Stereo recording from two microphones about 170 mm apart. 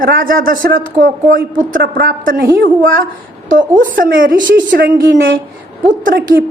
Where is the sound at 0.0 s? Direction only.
55° right (ahead or behind).